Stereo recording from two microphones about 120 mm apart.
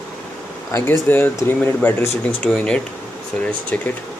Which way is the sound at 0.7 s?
20° left (ahead or behind).